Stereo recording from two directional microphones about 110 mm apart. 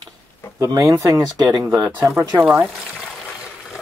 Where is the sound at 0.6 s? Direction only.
25° right (ahead or behind).